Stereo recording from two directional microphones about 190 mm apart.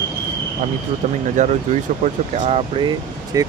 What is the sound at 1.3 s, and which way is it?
A man's voice, 40° right (ahead or behind).